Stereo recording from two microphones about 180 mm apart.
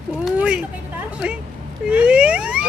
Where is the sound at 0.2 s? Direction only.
5° right (ahead or behind).